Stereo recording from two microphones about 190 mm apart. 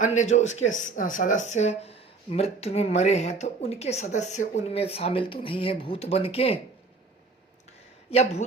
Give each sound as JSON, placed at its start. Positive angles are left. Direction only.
{"t": 0.0, "sound": "speech", "side_deg": 40}
{"t": 8.1, "sound": "speech", "side_deg": 35}